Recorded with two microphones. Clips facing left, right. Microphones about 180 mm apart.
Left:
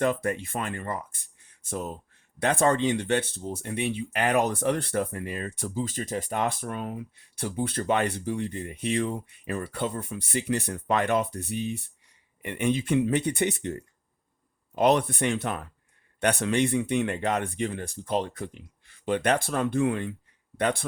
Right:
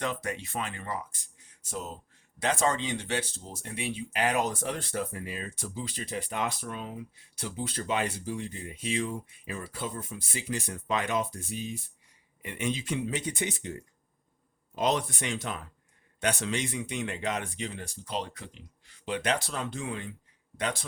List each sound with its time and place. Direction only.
0.0 s speech: 55° left (ahead or behind)
2.4 s speech: 55° left (ahead or behind)